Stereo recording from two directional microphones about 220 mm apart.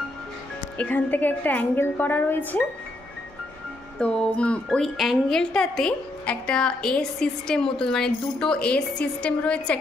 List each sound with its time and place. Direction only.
0.7 s a woman's voice: 5° left (ahead or behind)
4.0 s speech: 5° left (ahead or behind)